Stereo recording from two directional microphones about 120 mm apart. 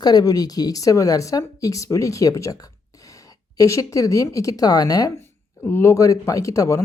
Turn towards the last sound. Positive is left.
turn(degrees=25)  # may be behind; listen again after turning